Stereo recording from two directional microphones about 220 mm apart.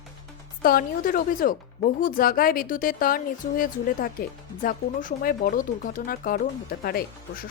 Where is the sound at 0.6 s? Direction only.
40° left (ahead or behind).